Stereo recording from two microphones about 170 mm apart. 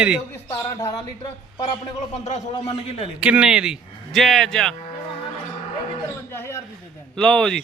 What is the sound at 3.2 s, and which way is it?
Speech, 5° right (ahead or behind).